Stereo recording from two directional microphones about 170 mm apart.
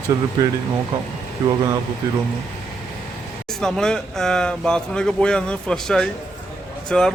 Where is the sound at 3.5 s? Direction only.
5° left (ahead or behind).